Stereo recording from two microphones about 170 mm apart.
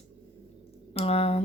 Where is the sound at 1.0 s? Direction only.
35° left (ahead or behind).